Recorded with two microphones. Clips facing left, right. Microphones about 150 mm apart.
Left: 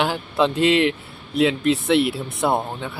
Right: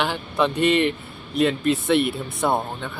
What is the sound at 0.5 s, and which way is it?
Speech, 90° left.